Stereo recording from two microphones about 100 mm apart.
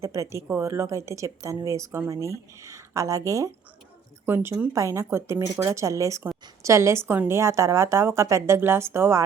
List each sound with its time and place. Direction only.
0.0 s a woman's voice: 30° right (ahead or behind)
4.3 s speech: 20° right (ahead or behind)
4.7 s a woman's voice: 30° right (ahead or behind)